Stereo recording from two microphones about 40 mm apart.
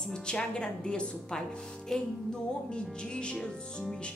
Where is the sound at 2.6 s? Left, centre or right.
Left.